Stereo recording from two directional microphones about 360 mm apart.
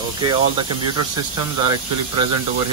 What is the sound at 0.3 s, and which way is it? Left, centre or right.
Speech, centre.